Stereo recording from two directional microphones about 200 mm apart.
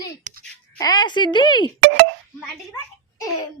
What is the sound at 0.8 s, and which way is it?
Speech, 20° left (ahead or behind).